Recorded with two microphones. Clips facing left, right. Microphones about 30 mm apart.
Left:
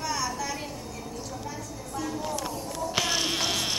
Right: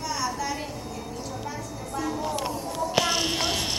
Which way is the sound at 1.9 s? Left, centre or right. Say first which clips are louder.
Right 3 dB; centre.